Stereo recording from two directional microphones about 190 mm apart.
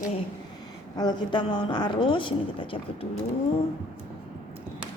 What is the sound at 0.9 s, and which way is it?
A woman's voice, 20° left (ahead or behind).